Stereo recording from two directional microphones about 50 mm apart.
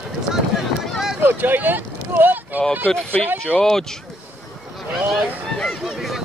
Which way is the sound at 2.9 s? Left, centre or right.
Centre.